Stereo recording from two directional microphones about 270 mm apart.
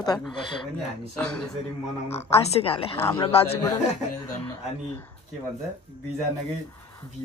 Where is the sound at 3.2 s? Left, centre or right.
Left.